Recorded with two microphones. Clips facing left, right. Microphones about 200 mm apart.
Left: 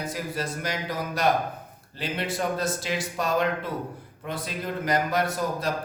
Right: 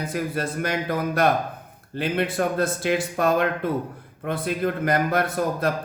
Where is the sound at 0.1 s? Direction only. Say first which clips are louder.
Right 4 dB; 55° right (ahead or behind).